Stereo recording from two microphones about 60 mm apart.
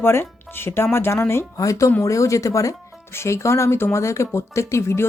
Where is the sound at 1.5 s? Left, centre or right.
Left.